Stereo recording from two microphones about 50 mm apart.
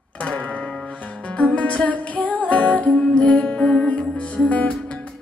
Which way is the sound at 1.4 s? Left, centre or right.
Left.